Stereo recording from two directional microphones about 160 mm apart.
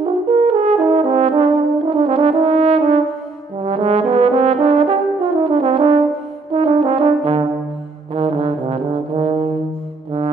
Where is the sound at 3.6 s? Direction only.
40° right (ahead or behind).